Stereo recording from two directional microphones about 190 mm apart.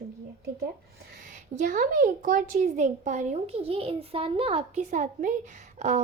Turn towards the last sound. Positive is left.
turn(degrees=-40)  # may be behind; listen again after turning